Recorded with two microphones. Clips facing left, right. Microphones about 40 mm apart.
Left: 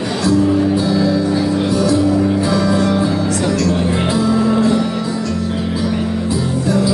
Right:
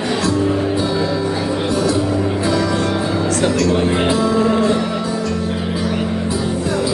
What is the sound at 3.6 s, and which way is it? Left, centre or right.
Music, right.